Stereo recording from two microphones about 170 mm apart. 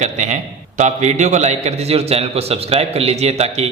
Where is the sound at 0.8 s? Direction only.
45° right (ahead or behind).